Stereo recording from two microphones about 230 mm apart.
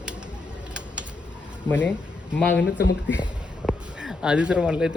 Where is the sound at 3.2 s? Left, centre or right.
Centre.